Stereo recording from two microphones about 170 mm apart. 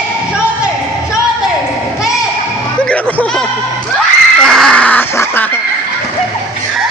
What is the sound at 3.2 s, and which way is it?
Speech, 5° left (ahead or behind).